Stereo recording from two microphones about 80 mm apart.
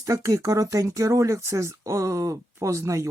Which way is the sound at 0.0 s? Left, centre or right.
Right.